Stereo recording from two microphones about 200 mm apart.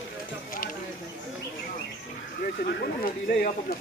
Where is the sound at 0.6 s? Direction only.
45° left (ahead or behind).